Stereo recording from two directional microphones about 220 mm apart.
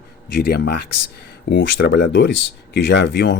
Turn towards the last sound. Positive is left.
turn(degrees=55)  # may be behind; listen again after turning